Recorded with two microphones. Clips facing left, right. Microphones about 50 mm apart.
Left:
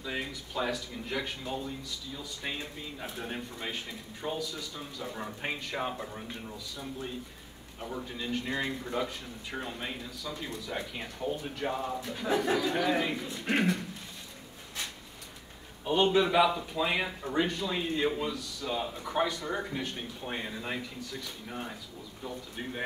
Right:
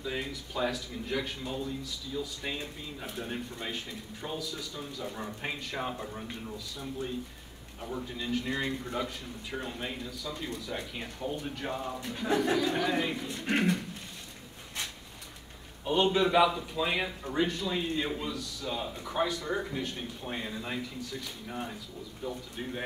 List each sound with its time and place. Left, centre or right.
0.0 s speech: centre
7.9 s speech: centre
15.8 s speech: centre